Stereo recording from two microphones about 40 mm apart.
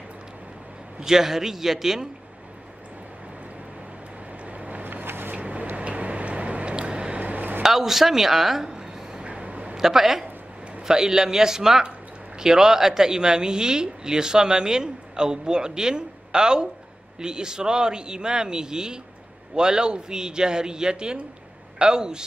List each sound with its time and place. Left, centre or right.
0.9 s speech: centre
4.5 s vehicle: right
4.8 s vehicle: right
5.3 s vehicle: right
5.8 s a sound: right
7.6 s speech: centre
8.7 s a sound: centre
9.2 s a sound: right
9.8 s a man's voice: centre